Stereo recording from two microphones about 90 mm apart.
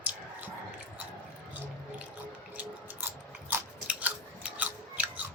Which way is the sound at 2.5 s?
25° right (ahead or behind).